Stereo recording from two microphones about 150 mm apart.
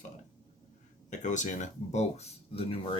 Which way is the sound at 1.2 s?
55° left (ahead or behind).